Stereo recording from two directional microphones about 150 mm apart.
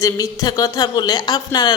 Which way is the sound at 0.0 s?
20° left (ahead or behind).